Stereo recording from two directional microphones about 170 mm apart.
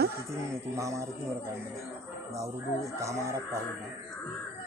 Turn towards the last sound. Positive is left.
turn(degrees=-15)  # may be behind; listen again after turning